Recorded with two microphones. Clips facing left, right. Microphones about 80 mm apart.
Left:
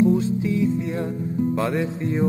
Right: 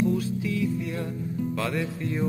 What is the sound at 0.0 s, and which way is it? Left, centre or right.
Music, left.